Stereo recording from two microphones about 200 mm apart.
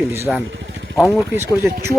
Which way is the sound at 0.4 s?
65° right (ahead or behind).